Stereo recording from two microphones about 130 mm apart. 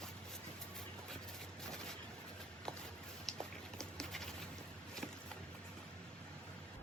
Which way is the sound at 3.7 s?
5° left (ahead or behind).